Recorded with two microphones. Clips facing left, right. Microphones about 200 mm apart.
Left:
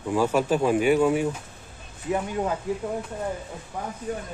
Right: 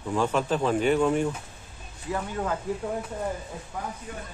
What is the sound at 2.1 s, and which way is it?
Speech, 20° left (ahead or behind).